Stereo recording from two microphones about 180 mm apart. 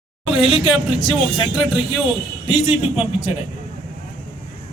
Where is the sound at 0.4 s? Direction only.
30° left (ahead or behind).